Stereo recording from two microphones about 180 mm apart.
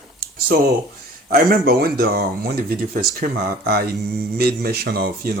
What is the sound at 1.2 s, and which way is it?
Speech, 55° right (ahead or behind).